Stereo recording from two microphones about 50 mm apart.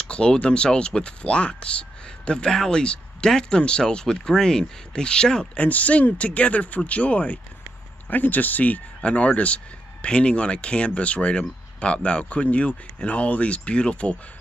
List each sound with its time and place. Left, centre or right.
0.1 s speech: centre
5.7 s speech: left